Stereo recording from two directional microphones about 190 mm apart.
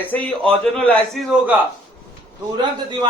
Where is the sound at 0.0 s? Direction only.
10° left (ahead or behind).